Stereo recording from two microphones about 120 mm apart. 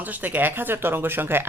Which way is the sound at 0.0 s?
15° right (ahead or behind).